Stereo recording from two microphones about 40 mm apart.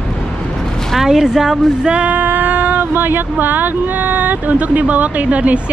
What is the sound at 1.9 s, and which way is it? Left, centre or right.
A woman's voice, right.